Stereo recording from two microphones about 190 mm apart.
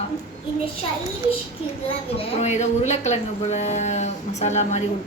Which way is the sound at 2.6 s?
35° left (ahead or behind).